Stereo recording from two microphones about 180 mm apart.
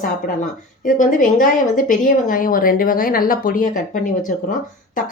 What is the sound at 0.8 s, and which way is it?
Speech, 45° left (ahead or behind).